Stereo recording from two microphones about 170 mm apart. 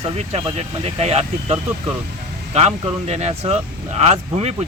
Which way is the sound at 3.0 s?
40° right (ahead or behind).